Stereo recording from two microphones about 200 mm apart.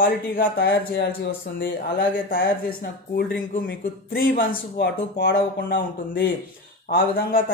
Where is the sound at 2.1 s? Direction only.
50° left (ahead or behind).